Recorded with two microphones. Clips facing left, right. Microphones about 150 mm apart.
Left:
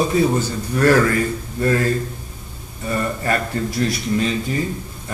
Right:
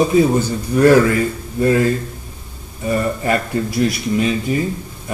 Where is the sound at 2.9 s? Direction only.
15° right (ahead or behind).